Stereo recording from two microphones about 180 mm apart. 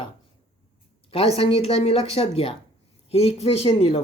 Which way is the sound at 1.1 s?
30° left (ahead or behind).